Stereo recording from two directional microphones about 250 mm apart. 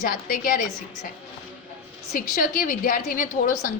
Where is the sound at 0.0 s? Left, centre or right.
Left.